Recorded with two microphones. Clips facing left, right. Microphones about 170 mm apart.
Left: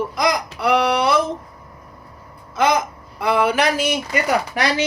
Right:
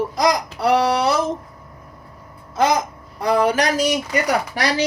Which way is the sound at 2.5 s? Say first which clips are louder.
Even; 40° right (ahead or behind).